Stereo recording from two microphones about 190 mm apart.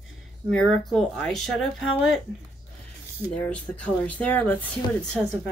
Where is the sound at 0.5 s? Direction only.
5° left (ahead or behind).